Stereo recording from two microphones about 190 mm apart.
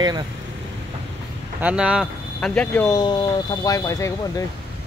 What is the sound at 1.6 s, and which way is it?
Speech, 5° right (ahead or behind).